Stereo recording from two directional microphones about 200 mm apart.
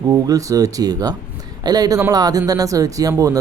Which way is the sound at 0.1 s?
15° right (ahead or behind).